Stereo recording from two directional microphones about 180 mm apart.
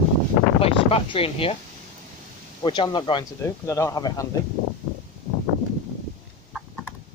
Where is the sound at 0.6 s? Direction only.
30° left (ahead or behind).